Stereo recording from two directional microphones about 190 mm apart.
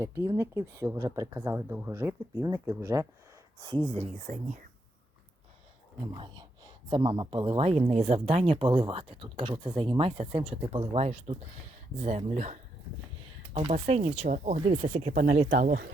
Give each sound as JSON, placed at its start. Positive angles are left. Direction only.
{"t": 0.0, "sound": "speech", "side_deg": -15}
{"t": 3.6, "sound": "speech", "side_deg": -25}
{"t": 6.0, "sound": "speech", "side_deg": -20}